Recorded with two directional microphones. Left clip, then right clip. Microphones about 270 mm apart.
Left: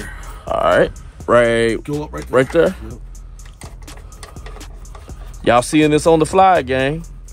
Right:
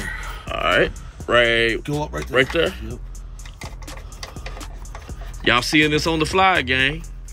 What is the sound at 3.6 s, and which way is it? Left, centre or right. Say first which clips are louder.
Music: right 2 dB; centre.